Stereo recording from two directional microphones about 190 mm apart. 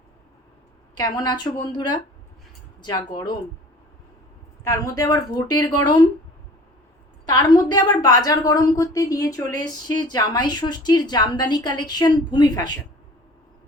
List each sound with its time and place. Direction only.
0.9 s a woman's voice: 20° left (ahead or behind)
4.6 s a woman's voice: 20° left (ahead or behind)
7.3 s a woman's voice: 20° left (ahead or behind)